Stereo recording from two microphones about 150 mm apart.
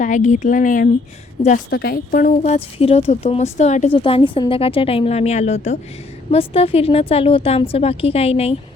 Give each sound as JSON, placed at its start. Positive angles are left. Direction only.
{"t": 0.0, "sound": "speech", "side_deg": 55}
{"t": 1.7, "sound": "a woman's voice", "side_deg": 90}
{"t": 2.0, "sound": "a woman's voice", "side_deg": 55}